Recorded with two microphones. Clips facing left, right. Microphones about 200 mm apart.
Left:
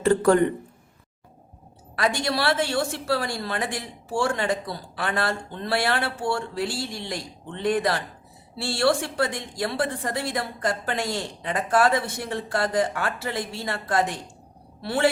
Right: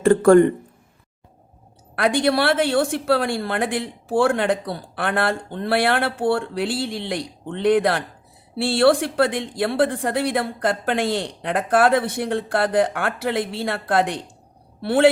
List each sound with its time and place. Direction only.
0.0 s speech: 50° right (ahead or behind)
2.0 s a woman's voice: 55° right (ahead or behind)